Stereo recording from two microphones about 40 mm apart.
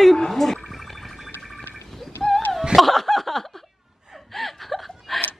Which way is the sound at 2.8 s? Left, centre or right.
Centre.